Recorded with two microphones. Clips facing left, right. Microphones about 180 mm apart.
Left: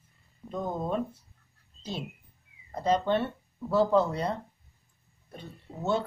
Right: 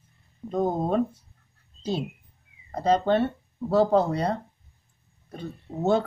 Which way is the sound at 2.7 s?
35° right (ahead or behind).